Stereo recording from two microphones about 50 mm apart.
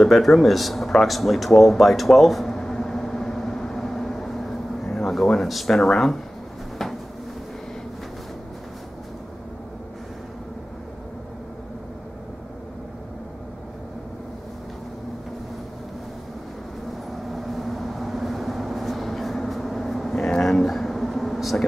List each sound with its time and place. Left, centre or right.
0.0 s a sound: centre
5.8 s speech: centre
17.3 s vehicle: centre